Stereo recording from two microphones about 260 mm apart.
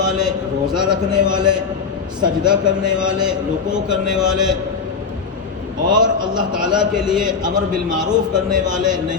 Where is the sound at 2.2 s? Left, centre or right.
Centre.